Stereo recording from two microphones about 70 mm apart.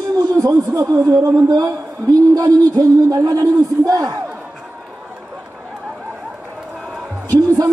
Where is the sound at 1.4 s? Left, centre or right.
Right.